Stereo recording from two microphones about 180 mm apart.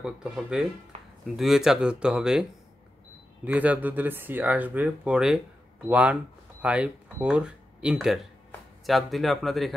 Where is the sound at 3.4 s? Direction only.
10° right (ahead or behind).